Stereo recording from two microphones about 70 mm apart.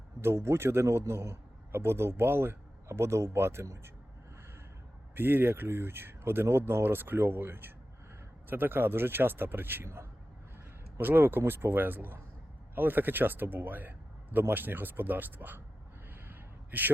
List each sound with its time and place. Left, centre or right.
0.2 s a man's voice: right
5.1 s a man's voice: right
16.3 s gasp: right